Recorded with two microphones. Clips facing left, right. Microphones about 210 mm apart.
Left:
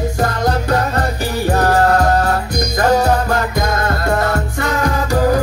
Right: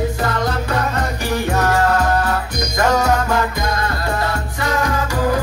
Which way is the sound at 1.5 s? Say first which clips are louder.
Left 4 dB; 35° left (ahead or behind).